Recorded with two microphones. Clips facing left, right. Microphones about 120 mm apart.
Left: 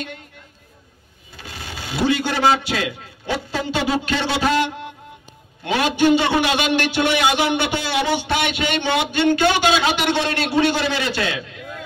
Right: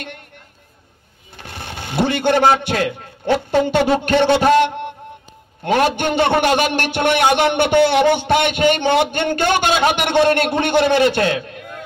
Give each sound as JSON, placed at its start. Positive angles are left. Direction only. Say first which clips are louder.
{"t": 1.3, "sound": "a man's voice", "louder": "right 3 dB", "side_deg": -55}